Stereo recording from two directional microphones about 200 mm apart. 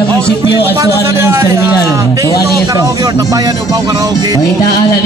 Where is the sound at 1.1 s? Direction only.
10° right (ahead or behind).